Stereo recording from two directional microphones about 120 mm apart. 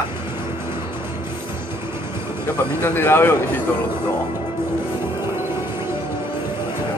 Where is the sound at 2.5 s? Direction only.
15° left (ahead or behind).